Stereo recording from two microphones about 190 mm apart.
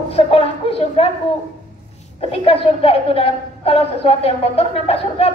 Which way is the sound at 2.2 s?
30° left (ahead or behind).